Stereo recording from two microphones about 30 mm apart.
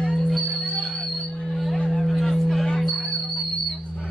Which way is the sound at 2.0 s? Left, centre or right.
Centre.